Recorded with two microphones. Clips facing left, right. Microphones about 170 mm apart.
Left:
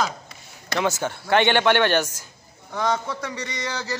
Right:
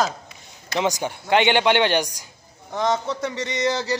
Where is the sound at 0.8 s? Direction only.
15° right (ahead or behind).